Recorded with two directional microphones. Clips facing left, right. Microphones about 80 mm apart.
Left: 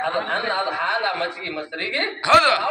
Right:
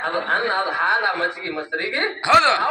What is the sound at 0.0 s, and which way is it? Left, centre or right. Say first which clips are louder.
Speech: right 1 dB; right.